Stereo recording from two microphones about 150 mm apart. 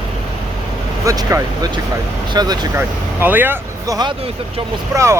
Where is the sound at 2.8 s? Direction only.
15° right (ahead or behind).